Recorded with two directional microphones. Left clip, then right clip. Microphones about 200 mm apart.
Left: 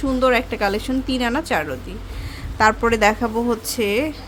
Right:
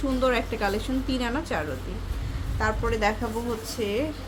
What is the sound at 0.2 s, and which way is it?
A woman's voice, 30° left (ahead or behind).